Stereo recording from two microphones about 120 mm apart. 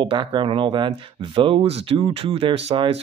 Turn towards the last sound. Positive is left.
turn(degrees=-50)  # may be behind; listen again after turning